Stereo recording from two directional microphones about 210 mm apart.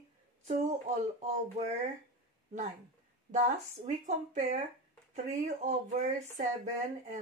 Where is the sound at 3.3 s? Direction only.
45° right (ahead or behind).